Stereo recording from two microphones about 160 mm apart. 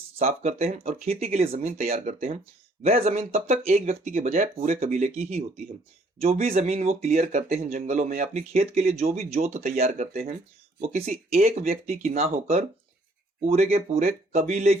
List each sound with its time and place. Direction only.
0.2 s speech: 40° right (ahead or behind)
7.2 s speech: 65° right (ahead or behind)
10.8 s speech: 45° right (ahead or behind)